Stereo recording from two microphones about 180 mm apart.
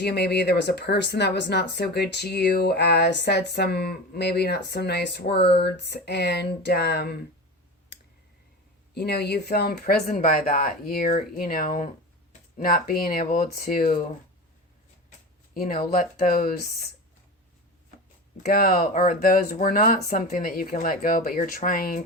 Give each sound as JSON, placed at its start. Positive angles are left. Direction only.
{"t": 0.0, "sound": "speech", "side_deg": 65}
{"t": 9.0, "sound": "speech", "side_deg": 65}
{"t": 15.5, "sound": "speech", "side_deg": 55}
{"t": 18.4, "sound": "speech", "side_deg": 55}